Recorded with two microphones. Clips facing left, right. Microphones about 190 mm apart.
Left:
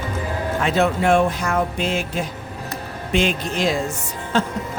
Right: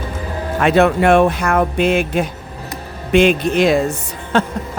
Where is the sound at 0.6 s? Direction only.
60° right (ahead or behind).